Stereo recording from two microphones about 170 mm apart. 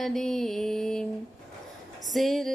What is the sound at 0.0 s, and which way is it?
Music, centre (ahead or behind).